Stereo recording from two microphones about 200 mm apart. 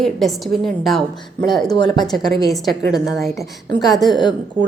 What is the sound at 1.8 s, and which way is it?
Speech, 20° left (ahead or behind).